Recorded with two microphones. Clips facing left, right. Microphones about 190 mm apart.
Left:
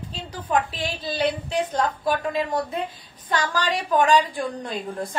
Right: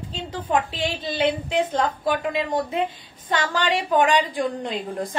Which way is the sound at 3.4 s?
25° right (ahead or behind).